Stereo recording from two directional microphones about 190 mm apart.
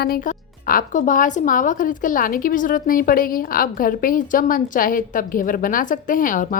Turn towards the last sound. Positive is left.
turn(degrees=45)  # may be behind; listen again after turning